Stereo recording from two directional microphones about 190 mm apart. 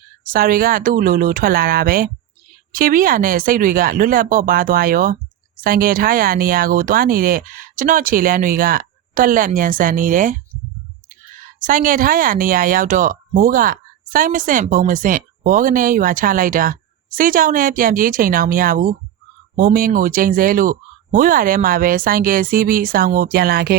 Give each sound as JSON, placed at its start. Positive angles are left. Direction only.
{"t": 0.3, "sound": "speech", "side_deg": -50}
{"t": 11.6, "sound": "speech", "side_deg": -45}